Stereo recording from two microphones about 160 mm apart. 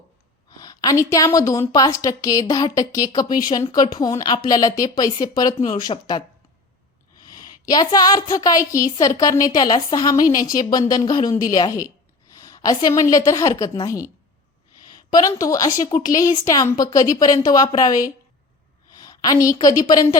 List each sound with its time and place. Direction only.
0.5 s a woman's voice: 25° left (ahead or behind)
7.3 s a woman's voice: 25° left (ahead or behind)
18.9 s a sound: 25° left (ahead or behind)
19.8 s a woman's voice: 25° left (ahead or behind)